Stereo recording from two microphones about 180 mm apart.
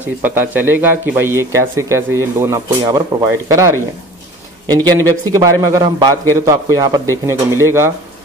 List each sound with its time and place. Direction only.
0.2 s a man's voice: 10° right (ahead or behind)